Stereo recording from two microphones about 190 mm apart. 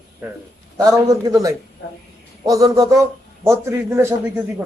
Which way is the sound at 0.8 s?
15° right (ahead or behind).